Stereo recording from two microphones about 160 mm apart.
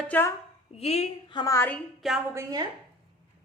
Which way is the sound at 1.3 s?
30° left (ahead or behind).